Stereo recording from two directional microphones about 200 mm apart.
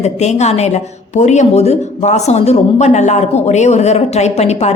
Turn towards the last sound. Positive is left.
turn(degrees=35)  # may be behind; listen again after turning